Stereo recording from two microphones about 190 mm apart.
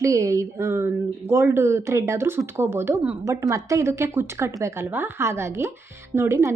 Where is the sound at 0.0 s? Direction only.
15° right (ahead or behind).